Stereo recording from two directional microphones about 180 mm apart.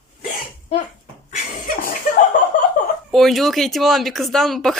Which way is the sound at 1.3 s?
50° left (ahead or behind).